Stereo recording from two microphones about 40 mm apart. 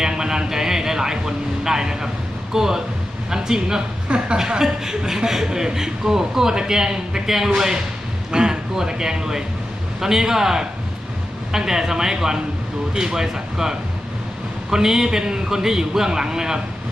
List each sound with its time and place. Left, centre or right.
0.0 s a man's voice: centre